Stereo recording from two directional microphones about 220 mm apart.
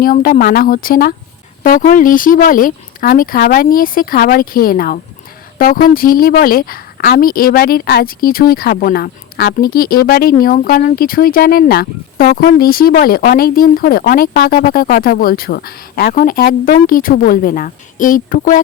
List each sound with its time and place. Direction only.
0.0 s a woman's voice: 40° left (ahead or behind)